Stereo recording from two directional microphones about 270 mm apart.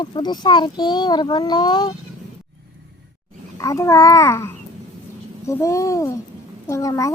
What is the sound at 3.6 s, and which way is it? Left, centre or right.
A child's voice, centre.